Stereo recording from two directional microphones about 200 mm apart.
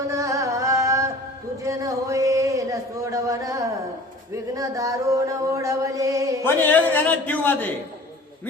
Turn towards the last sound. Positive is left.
turn(degrees=10)  # may be behind; listen again after turning